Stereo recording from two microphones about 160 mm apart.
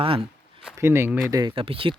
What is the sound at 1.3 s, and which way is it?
Speech, 25° right (ahead or behind).